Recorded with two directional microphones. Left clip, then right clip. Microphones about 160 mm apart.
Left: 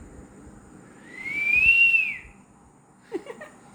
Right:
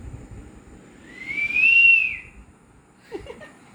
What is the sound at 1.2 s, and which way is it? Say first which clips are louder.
Whistling: right 1 dB; 55° left (ahead or behind).